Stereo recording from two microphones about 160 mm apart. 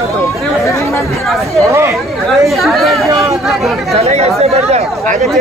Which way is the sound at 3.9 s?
40° right (ahead or behind).